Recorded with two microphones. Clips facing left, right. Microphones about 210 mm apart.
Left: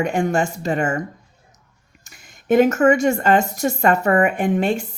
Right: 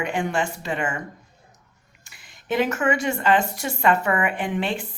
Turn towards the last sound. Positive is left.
turn(degrees=45)  # may be behind; listen again after turning